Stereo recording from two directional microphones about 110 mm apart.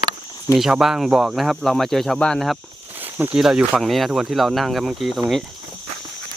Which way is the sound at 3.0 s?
15° right (ahead or behind).